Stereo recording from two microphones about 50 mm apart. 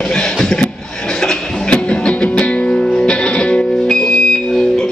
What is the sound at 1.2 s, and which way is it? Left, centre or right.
Music, left.